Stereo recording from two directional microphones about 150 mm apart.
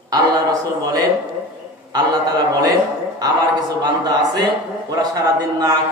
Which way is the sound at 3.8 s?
30° right (ahead or behind).